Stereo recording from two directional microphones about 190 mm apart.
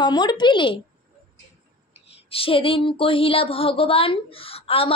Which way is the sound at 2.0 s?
30° left (ahead or behind).